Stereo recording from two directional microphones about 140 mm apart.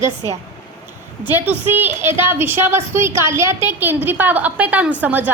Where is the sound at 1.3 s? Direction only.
15° right (ahead or behind).